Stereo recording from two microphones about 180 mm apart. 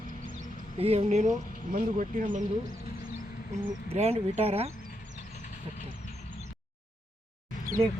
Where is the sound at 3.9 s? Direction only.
35° right (ahead or behind).